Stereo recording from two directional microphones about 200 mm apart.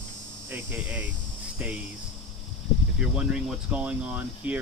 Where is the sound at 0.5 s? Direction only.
10° right (ahead or behind).